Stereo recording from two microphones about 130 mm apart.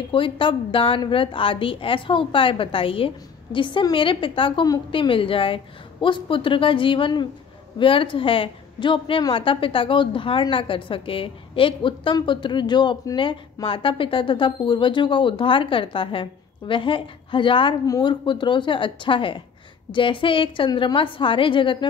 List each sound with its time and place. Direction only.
0.1 s a woman's voice: 40° left (ahead or behind)